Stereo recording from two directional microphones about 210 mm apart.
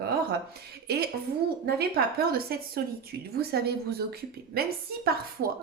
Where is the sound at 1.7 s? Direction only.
50° right (ahead or behind).